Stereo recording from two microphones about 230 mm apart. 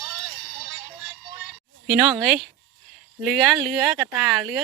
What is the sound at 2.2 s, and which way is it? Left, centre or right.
Speech, centre.